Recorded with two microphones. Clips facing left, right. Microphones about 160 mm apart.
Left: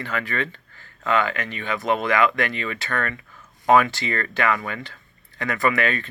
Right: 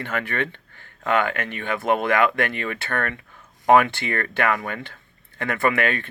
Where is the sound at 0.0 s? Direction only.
55° right (ahead or behind).